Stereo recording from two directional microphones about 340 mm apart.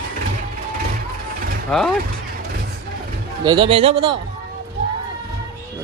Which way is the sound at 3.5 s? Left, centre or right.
Centre.